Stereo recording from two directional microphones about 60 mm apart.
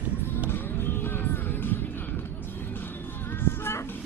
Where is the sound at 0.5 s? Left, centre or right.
Left.